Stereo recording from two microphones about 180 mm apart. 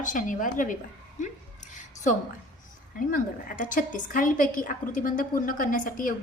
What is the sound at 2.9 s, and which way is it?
A woman's voice, 50° left (ahead or behind).